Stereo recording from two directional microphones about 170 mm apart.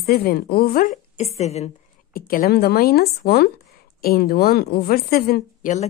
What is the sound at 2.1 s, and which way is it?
A woman's voice, 60° left (ahead or behind).